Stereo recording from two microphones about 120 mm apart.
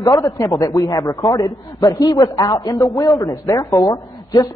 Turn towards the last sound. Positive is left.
turn(degrees=30)  # may be behind; listen again after turning